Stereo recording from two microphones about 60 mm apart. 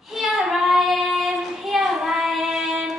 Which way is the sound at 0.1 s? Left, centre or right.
Centre.